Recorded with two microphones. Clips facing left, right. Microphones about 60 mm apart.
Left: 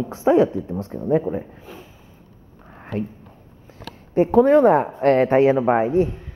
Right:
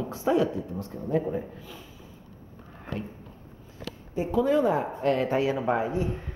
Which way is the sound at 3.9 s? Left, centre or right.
Left.